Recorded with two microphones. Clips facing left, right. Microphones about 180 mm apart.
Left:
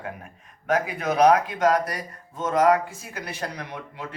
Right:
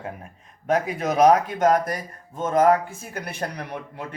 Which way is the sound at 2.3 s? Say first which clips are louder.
Right 1 dB; 50° right (ahead or behind).